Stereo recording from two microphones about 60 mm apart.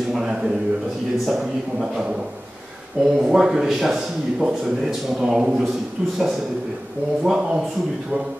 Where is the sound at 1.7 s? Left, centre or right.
Centre.